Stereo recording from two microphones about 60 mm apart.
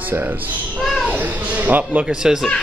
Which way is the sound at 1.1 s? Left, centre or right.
Right.